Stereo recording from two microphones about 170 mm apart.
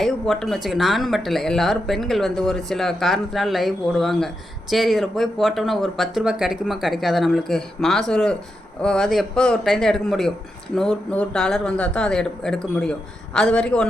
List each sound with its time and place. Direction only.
0.0 s speech: centre (ahead or behind)